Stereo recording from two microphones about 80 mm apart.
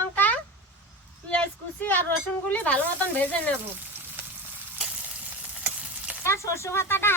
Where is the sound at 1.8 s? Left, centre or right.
Left.